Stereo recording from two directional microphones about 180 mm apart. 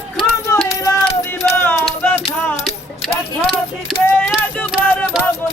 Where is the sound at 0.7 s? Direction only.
20° left (ahead or behind).